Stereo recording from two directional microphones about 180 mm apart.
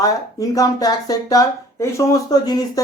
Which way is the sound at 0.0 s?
20° left (ahead or behind).